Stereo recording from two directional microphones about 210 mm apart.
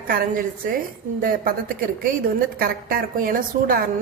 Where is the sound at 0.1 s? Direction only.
40° right (ahead or behind).